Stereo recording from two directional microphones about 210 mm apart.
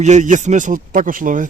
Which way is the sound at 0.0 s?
35° right (ahead or behind).